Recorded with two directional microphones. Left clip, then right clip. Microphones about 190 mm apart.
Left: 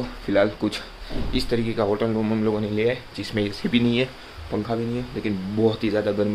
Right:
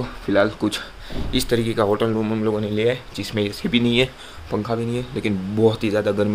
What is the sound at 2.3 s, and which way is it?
Speech, 5° right (ahead or behind).